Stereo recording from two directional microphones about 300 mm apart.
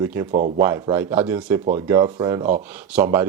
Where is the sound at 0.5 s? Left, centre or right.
Centre.